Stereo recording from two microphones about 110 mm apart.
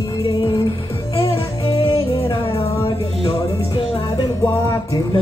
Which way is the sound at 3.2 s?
55° left (ahead or behind).